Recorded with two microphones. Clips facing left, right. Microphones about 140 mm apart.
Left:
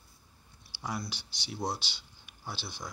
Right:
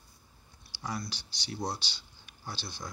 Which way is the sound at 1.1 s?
55° left (ahead or behind).